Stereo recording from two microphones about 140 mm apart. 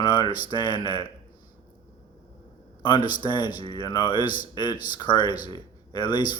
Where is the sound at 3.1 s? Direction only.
30° left (ahead or behind).